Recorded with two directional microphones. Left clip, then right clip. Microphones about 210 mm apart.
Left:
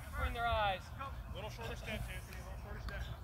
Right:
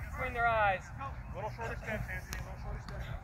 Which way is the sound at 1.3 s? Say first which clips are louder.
Right 8 dB; 20° right (ahead or behind).